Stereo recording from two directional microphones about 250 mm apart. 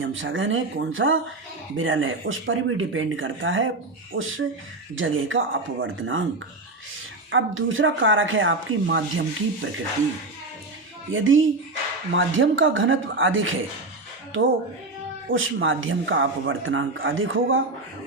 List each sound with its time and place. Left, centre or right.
0.0 s speech: right
7.3 s speech: right
11.1 s speech: right